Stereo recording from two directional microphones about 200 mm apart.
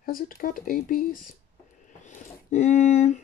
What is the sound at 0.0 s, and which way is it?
Speech, 45° left (ahead or behind).